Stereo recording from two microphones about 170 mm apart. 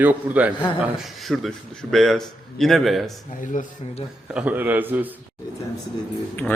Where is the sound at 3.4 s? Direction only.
50° left (ahead or behind).